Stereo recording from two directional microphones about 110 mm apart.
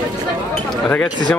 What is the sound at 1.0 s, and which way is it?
Speech, 40° left (ahead or behind).